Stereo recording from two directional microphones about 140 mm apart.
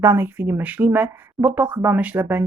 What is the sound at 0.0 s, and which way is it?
Speech, 15° right (ahead or behind).